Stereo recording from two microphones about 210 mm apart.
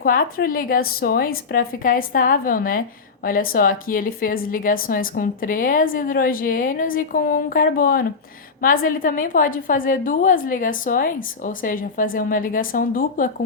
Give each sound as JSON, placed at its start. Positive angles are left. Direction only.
{"t": 0.0, "sound": "a woman's voice", "side_deg": 45}